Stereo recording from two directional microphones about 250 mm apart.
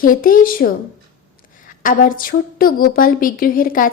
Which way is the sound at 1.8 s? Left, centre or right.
Left.